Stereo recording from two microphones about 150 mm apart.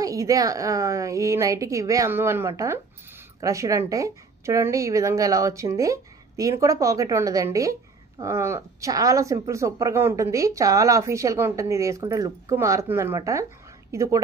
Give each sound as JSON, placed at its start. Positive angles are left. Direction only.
{"t": 0.0, "sound": "speech", "side_deg": -20}